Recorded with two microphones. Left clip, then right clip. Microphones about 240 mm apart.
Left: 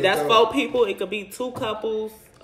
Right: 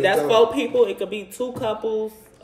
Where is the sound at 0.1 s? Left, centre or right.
Centre.